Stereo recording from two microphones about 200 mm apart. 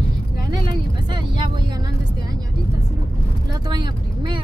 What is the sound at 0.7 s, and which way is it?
Speech, 20° right (ahead or behind).